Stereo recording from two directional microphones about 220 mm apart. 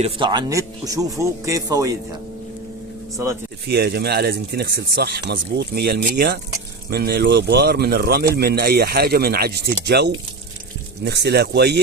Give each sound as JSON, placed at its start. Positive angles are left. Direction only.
{"t": 0.0, "sound": "speech", "side_deg": -20}
{"t": 3.7, "sound": "speech", "side_deg": -50}